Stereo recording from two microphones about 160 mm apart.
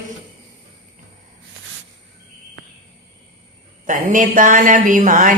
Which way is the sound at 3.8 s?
55° right (ahead or behind).